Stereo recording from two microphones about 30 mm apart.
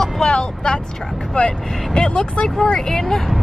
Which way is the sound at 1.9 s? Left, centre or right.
Left.